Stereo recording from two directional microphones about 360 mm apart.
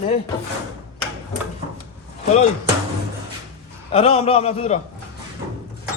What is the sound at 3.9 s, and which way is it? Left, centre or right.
Speech, centre.